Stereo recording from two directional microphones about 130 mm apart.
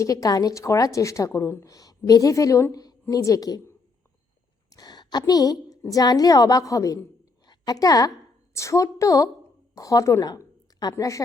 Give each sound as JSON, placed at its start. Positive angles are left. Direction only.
{"t": 0.0, "sound": "a woman's voice", "side_deg": 25}